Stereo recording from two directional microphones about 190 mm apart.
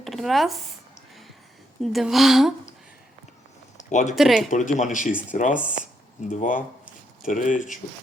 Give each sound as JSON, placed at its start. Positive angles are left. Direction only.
{"t": 0.0, "sound": "speech", "side_deg": 0}
{"t": 1.8, "sound": "speech", "side_deg": 0}
{"t": 3.8, "sound": "a sound", "side_deg": 40}
{"t": 4.1, "sound": "speech", "side_deg": 0}
{"t": 4.5, "sound": "speech", "side_deg": 40}